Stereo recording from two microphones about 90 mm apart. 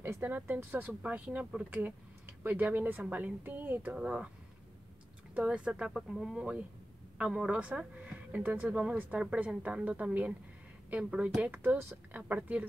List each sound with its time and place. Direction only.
0.0 s speech: 20° right (ahead or behind)
5.3 s speech: 15° right (ahead or behind)